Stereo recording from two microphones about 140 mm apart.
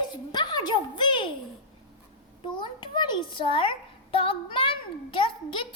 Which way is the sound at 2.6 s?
35° left (ahead or behind).